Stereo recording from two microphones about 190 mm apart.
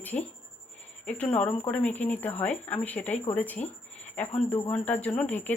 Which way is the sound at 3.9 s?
10° left (ahead or behind).